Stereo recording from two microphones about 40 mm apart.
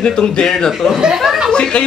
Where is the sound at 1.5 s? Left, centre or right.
Left.